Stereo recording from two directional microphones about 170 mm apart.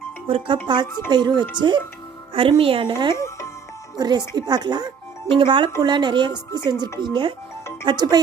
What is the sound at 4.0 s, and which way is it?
A woman's voice, 25° right (ahead or behind).